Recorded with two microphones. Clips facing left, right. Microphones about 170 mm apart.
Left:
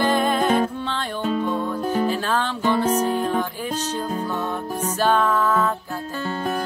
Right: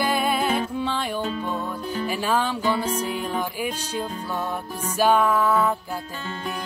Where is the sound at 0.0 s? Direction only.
10° right (ahead or behind).